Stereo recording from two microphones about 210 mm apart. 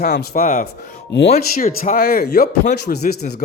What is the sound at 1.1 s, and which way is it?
Speech, 55° left (ahead or behind).